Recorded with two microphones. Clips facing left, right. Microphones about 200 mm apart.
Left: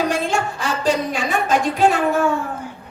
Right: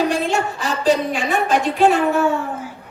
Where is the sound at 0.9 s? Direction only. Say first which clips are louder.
Right 3 dB; 40° left (ahead or behind).